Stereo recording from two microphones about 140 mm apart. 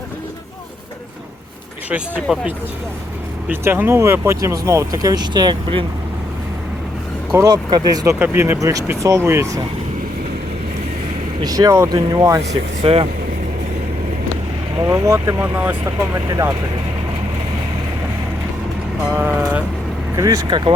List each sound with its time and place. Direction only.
2.2 s speech: centre (ahead or behind)
3.5 s speech: 15° right (ahead or behind); by 5.8 s 30° right (ahead or behind)
7.3 s speech: 25° right (ahead or behind)
8.2 s speech: 15° right (ahead or behind)
11.4 s speech: 25° right (ahead or behind)
12.8 s speech: 45° right (ahead or behind)
14.8 s speech: 20° right (ahead or behind)
19.1 s speech: 15° right (ahead or behind)